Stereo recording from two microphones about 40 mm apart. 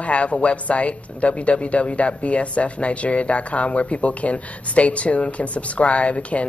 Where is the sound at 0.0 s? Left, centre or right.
Left.